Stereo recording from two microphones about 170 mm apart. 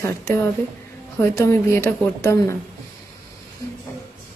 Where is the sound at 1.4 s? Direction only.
15° left (ahead or behind).